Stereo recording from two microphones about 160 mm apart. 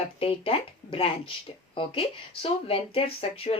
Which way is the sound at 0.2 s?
35° left (ahead or behind).